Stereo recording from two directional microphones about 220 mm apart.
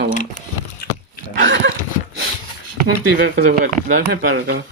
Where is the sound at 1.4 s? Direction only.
60° right (ahead or behind).